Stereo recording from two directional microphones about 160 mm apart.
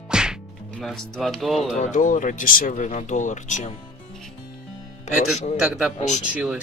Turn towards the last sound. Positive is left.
turn(degrees=-5)  # may be behind; listen again after turning